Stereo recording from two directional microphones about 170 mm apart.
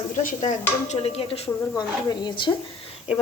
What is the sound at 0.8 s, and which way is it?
A woman's voice, 35° left (ahead or behind).